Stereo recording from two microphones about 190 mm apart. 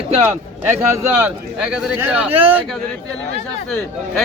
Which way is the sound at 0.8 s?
10° right (ahead or behind).